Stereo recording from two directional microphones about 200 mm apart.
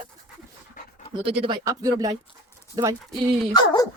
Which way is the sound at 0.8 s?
40° left (ahead or behind).